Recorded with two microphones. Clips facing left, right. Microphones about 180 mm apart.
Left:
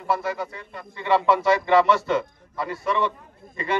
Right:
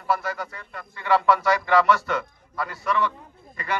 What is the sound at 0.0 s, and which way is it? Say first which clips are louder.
Speech: left 1 dB; 25° left (ahead or behind).